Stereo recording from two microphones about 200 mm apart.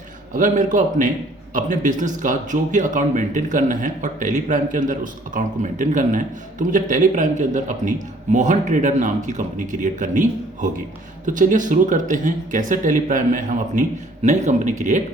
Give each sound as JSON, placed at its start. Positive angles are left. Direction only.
{"t": 0.3, "sound": "speech", "side_deg": -40}